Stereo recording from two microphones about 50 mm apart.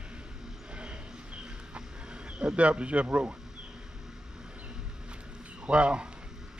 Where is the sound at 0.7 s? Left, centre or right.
Right.